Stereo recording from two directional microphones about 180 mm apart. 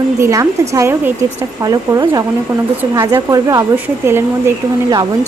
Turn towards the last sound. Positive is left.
turn(degrees=-20)  # may be behind; listen again after turning